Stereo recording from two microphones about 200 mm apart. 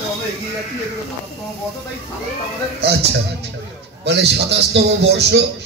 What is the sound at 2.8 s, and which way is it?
A man's voice, 55° right (ahead or behind).